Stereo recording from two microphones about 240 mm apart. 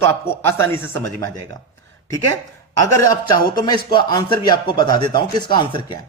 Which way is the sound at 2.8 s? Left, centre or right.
Centre.